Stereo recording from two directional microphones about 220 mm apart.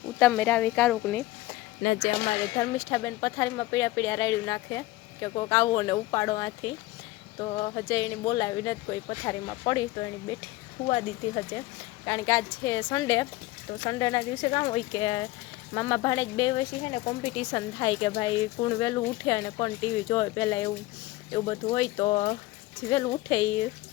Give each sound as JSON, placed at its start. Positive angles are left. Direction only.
{"t": 0.2, "sound": "speech", "side_deg": 5}
{"t": 2.6, "sound": "speech", "side_deg": 15}